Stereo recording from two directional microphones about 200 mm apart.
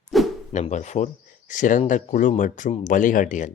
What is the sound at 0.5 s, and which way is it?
Speech, 35° left (ahead or behind).